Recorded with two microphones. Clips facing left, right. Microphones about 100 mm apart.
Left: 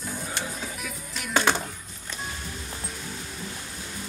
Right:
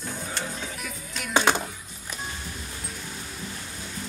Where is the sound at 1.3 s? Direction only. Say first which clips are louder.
Right 1 dB; 15° right (ahead or behind).